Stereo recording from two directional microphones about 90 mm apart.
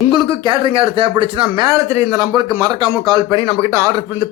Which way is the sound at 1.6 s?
40° right (ahead or behind).